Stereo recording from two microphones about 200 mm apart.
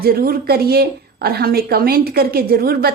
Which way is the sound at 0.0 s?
50° right (ahead or behind).